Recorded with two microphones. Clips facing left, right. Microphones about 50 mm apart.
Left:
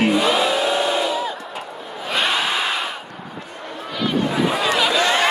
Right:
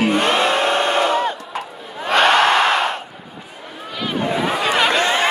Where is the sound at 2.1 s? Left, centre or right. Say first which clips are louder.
Right 7 dB; right.